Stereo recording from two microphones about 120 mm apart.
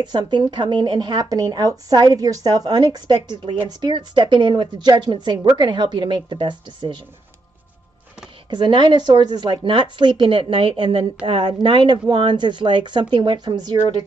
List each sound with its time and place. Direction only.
0.0 s a woman's voice: 35° right (ahead or behind)
8.5 s a woman's voice: 40° right (ahead or behind)